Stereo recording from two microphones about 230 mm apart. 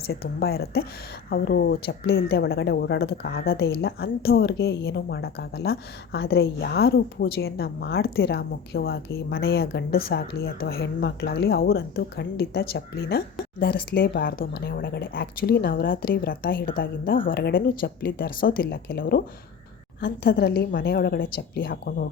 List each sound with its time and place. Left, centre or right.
0.1 s speech: left